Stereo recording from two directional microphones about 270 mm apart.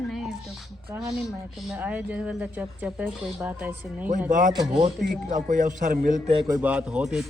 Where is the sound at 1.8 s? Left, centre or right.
Centre.